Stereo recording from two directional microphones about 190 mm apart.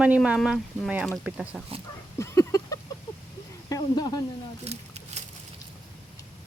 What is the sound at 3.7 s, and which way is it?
Speech, 20° left (ahead or behind).